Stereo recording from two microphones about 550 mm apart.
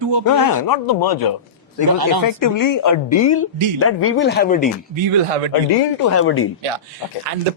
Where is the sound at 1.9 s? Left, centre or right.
Right.